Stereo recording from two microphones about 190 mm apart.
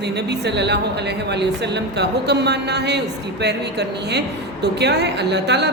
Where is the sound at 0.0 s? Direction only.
60° right (ahead or behind).